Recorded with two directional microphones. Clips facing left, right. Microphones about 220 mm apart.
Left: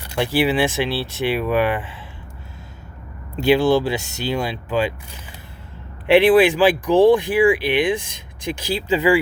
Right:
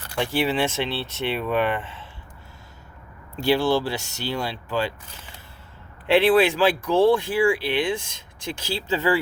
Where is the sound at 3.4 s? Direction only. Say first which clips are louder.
Left 5 dB; 15° left (ahead or behind).